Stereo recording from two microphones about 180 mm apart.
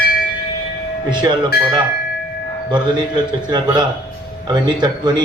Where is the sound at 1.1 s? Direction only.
25° right (ahead or behind).